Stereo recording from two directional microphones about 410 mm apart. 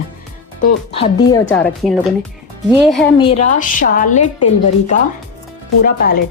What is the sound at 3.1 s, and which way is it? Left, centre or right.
A woman's voice, centre.